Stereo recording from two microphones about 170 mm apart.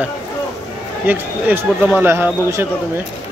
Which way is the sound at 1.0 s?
10° right (ahead or behind).